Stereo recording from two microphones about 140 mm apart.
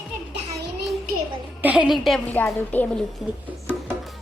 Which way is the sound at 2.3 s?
10° left (ahead or behind).